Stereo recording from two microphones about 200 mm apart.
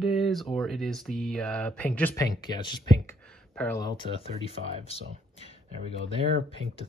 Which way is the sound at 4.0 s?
30° left (ahead or behind).